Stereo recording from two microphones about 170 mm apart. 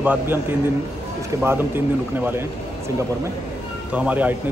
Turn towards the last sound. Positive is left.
turn(degrees=-10)  # may be behind; listen again after turning